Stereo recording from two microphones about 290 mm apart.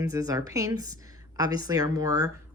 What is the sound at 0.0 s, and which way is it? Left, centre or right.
Speech, centre.